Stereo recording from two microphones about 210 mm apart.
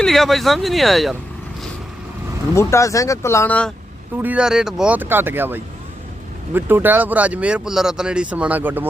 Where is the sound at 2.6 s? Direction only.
15° left (ahead or behind).